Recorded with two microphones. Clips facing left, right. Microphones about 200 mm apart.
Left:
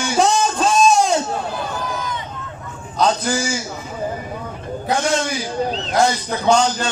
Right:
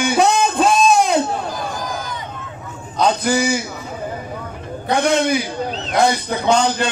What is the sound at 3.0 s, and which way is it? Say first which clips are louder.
Speech: right 2 dB; 60° right (ahead or behind).